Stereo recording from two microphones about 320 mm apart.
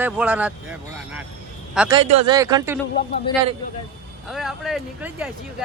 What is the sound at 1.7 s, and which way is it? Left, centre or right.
Speech, centre.